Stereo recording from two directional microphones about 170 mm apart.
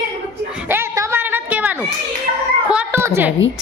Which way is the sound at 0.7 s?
15° right (ahead or behind).